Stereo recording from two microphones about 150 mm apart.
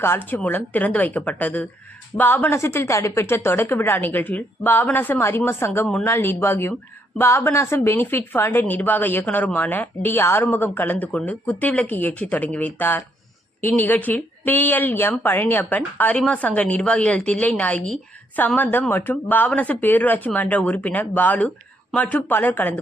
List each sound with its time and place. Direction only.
0.0 s speech: 15° left (ahead or behind)